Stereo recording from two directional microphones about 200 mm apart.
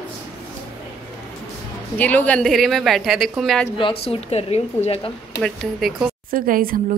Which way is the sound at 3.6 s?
25° left (ahead or behind).